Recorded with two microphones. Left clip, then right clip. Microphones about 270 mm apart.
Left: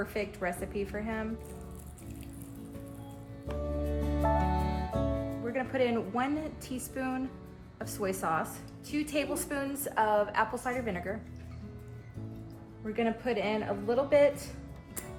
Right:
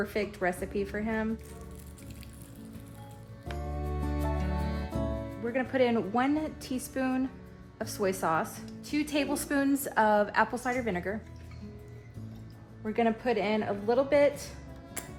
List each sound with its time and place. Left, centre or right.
0.0 s a woman's voice: right
3.5 s music: centre
5.5 s a woman's voice: right
12.8 s a woman's voice: right